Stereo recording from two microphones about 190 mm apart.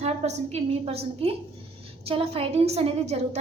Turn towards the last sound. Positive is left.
turn(degrees=-35)  # may be behind; listen again after turning